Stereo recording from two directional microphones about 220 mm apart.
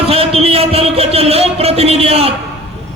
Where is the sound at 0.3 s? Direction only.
25° right (ahead or behind).